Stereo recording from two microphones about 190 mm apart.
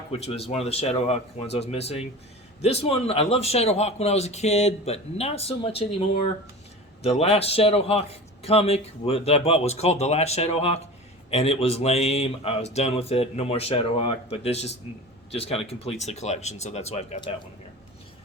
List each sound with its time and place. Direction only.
0.1 s a man's voice: 30° left (ahead or behind)